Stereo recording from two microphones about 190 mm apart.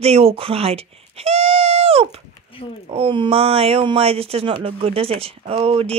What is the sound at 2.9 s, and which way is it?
Speech, 25° right (ahead or behind).